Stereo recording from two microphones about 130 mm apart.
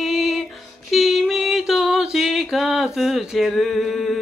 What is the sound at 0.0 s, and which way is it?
Female singing, 5° right (ahead or behind).